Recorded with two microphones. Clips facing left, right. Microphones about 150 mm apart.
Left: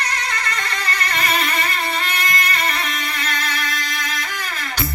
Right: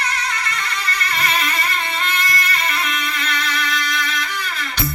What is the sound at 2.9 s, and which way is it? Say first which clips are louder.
Music: right 1 dB; 40° left (ahead or behind).